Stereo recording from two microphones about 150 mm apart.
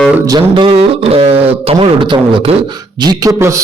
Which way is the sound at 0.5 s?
40° right (ahead or behind).